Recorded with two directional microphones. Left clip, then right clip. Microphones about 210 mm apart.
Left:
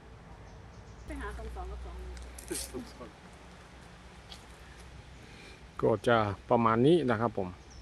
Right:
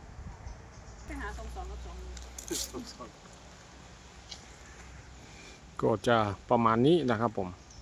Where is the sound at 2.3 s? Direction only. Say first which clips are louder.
Right 3 dB; 35° right (ahead or behind).